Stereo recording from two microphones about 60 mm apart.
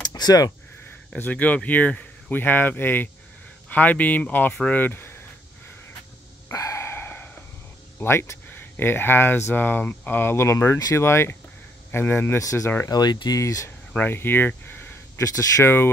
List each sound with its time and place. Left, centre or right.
0.1 s a sound: left
1.1 s speech: left
6.5 s a sound: left
8.0 s speech: left
12.4 s speech: left
13.9 s speech: left
15.2 s speech: left
15.6 s speech: left